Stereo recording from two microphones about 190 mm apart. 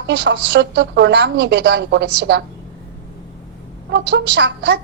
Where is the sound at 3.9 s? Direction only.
65° right (ahead or behind).